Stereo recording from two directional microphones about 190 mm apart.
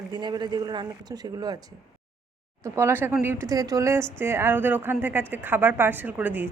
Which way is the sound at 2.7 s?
15° right (ahead or behind).